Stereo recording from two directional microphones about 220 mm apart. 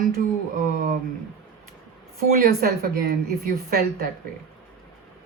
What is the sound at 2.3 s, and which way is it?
A woman's voice, 40° right (ahead or behind).